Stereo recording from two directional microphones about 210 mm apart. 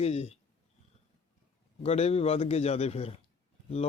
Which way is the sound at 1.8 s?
30° left (ahead or behind).